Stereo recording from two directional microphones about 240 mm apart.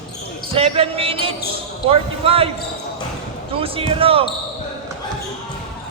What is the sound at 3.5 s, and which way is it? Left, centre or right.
Speech, right.